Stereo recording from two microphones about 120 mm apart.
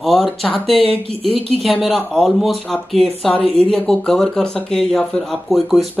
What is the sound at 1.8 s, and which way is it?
Speech, centre (ahead or behind).